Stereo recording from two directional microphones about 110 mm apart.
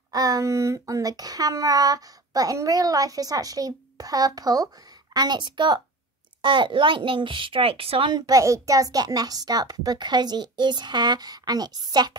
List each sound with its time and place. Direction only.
0.1 s a child's voice: 35° right (ahead or behind); by 8.1 s 60° right (ahead or behind)
8.1 s speech: 35° right (ahead or behind)